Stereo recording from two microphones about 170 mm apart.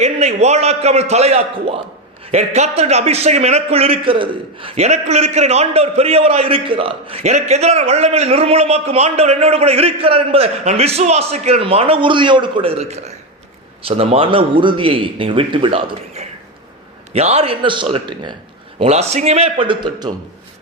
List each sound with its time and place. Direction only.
0.0 s a man's voice: 40° right (ahead or behind)
18.8 s a man's voice: 40° right (ahead or behind)